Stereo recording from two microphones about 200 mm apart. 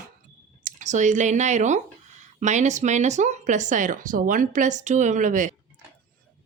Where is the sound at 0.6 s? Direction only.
35° right (ahead or behind).